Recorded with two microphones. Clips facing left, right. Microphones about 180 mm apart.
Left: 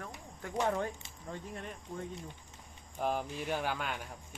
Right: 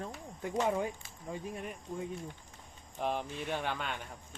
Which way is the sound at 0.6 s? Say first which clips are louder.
Right 1 dB; 10° right (ahead or behind).